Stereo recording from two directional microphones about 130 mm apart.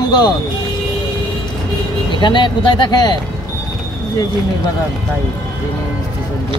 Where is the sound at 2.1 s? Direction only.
35° left (ahead or behind).